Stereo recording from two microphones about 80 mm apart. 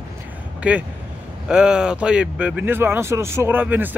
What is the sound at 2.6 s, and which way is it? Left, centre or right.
Speech, right.